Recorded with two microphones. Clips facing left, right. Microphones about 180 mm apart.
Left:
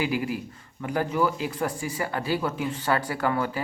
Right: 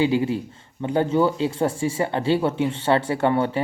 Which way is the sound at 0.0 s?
25° right (ahead or behind).